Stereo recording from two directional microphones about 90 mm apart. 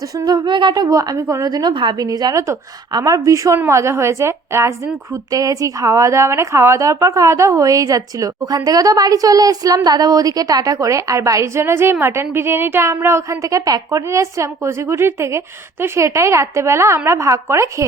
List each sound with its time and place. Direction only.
0.3 s a woman's voice: 55° right (ahead or behind)
2.0 s a woman's voice: 45° right (ahead or behind); by 4.7 s 30° right (ahead or behind)
5.1 s a woman's voice: 40° right (ahead or behind)